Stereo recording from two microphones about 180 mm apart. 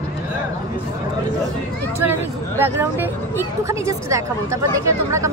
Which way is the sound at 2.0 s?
15° right (ahead or behind).